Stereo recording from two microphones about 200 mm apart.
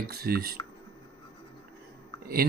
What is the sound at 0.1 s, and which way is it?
Speech, 50° right (ahead or behind).